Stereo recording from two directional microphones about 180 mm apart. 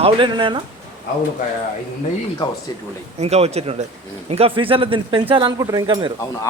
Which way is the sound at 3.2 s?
35° right (ahead or behind).